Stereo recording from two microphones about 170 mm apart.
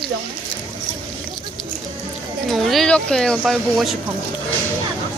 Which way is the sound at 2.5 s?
Centre (ahead or behind).